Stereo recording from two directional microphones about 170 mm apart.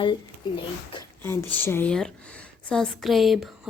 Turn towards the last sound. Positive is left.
turn(degrees=0)  # may be behind; listen again after turning